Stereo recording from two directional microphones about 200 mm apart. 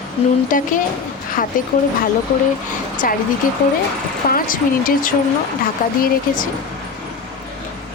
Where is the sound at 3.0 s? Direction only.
45° left (ahead or behind).